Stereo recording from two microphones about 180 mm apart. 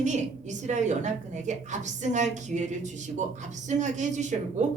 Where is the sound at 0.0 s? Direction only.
40° right (ahead or behind).